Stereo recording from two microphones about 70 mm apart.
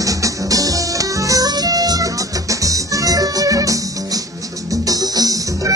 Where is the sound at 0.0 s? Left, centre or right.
Right.